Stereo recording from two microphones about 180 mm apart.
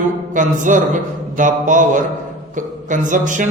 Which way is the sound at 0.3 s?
45° right (ahead or behind).